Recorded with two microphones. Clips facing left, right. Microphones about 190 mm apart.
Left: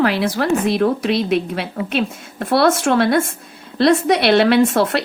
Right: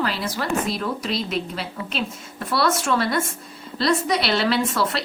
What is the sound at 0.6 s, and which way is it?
Speech, 55° left (ahead or behind).